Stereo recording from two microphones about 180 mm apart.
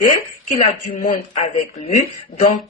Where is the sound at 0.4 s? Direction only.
45° left (ahead or behind).